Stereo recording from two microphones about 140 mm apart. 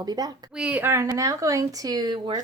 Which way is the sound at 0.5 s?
10° right (ahead or behind).